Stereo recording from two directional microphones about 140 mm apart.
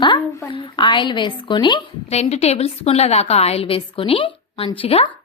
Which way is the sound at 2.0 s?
50° left (ahead or behind).